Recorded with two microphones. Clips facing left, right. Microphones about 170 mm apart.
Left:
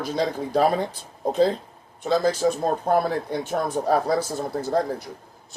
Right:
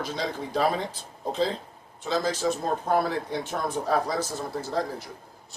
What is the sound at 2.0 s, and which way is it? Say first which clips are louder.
Speech: left 5 dB; 55° left (ahead or behind).